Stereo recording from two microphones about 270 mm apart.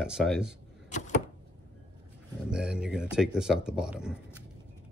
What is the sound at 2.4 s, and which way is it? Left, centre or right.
Speech, centre.